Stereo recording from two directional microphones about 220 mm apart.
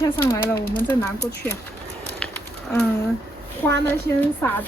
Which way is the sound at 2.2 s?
5° left (ahead or behind).